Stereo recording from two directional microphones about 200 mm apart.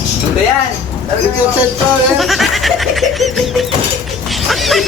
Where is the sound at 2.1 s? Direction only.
Centre (ahead or behind).